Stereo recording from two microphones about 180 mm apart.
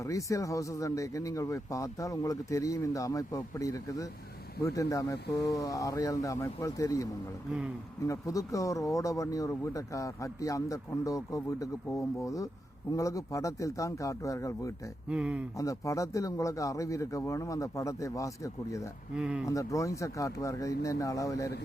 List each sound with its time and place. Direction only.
0.0 s speech: 15° left (ahead or behind)
15.1 s speech: 5° right (ahead or behind)
15.5 s speech: 15° left (ahead or behind)
19.1 s speech: 5° right (ahead or behind)
19.5 s speech: 15° left (ahead or behind)